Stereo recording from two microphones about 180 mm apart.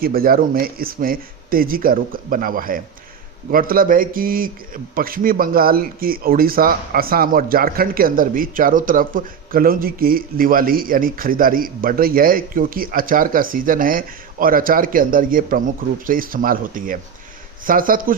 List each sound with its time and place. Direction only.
0.0 s a man's voice: 55° right (ahead or behind)